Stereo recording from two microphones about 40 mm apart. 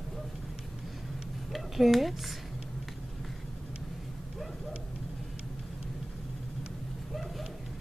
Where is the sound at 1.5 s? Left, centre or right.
Centre.